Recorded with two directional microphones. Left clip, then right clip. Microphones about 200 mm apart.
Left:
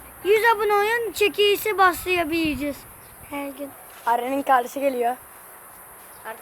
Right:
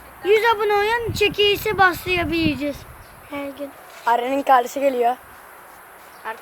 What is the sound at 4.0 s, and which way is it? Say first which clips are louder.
A woman's voice: right 3 dB; 5° right (ahead or behind).